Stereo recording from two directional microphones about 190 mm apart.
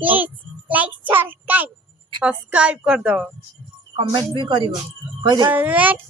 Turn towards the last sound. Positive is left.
turn(degrees=-10)  # may be behind; listen again after turning